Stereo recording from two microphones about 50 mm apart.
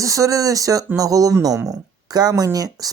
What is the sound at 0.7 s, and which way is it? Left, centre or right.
Speech, right.